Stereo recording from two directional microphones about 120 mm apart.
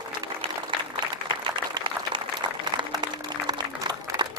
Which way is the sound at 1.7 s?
40° right (ahead or behind).